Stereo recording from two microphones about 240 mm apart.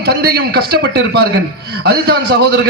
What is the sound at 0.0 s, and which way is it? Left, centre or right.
A man's voice, right.